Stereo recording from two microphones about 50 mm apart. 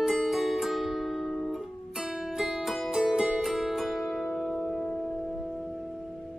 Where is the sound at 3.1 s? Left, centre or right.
Centre.